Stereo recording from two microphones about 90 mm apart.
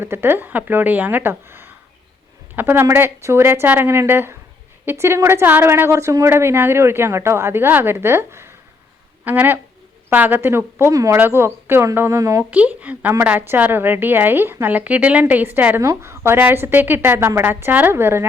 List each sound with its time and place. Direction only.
0.0 s a woman's voice: 25° right (ahead or behind)
12.5 s a woman's voice: 15° right (ahead or behind)
15.8 s a woman's voice: 30° right (ahead or behind)